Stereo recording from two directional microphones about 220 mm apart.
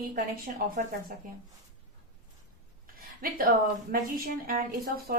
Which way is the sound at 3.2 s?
40° right (ahead or behind).